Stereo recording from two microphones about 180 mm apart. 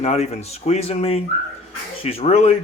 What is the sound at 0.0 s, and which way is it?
Speech, 35° left (ahead or behind).